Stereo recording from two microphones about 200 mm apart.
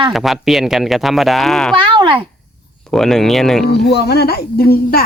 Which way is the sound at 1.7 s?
25° right (ahead or behind).